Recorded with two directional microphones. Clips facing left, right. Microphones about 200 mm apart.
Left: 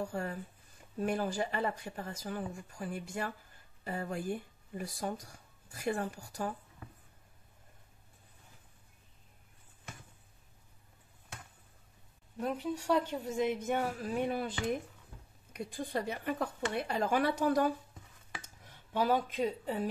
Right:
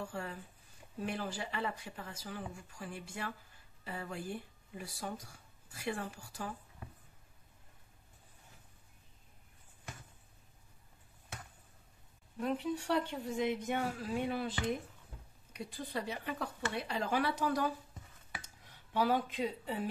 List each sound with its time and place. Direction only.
0.0 s speech: 45° left (ahead or behind)
12.4 s speech: 40° left (ahead or behind)
15.5 s speech: 50° left (ahead or behind)
19.3 s speech: 45° left (ahead or behind)